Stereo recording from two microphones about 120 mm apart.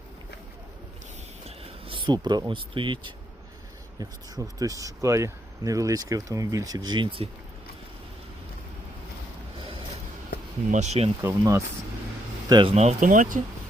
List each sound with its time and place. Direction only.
1.5 s a sound: 50° right (ahead or behind)
2.5 s speech: 45° right (ahead or behind)
4.4 s speech: 30° right (ahead or behind); by 7.3 s 45° right (ahead or behind)
10.7 s speech: 75° right (ahead or behind)
11.2 s speech: 25° right (ahead or behind)
12.5 s speech: 35° right (ahead or behind)
12.7 s speech: 65° right (ahead or behind); by 13.4 s 90° right